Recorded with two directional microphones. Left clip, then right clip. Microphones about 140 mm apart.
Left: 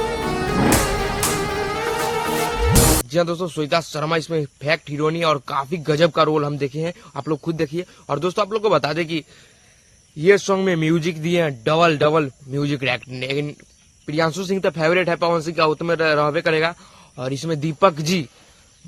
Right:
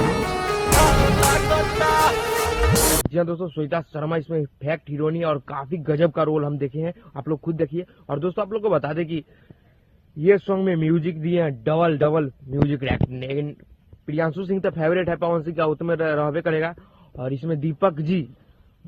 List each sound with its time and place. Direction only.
0.0 s music: centre (ahead or behind)
3.1 s speech: 35° left (ahead or behind)
10.2 s a man's voice: 30° left (ahead or behind)